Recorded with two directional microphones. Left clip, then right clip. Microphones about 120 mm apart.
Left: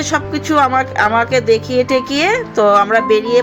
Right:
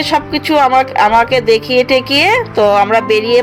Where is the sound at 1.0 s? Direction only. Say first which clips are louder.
Right 4 dB; 35° right (ahead or behind).